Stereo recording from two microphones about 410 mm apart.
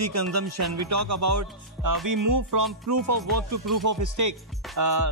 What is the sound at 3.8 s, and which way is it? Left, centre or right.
Speech, right.